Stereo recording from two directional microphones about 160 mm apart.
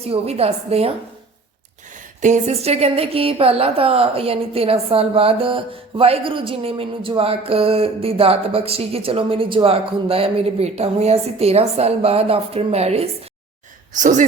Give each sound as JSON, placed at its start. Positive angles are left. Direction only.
{"t": 0.0, "sound": "speech", "side_deg": -40}
{"t": 2.2, "sound": "speech", "side_deg": -45}
{"t": 13.9, "sound": "speech", "side_deg": -50}